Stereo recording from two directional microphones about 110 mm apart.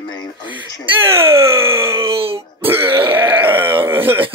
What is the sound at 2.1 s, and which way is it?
Speech, 60° right (ahead or behind).